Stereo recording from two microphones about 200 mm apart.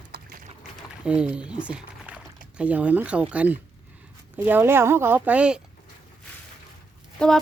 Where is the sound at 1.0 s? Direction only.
5° right (ahead or behind).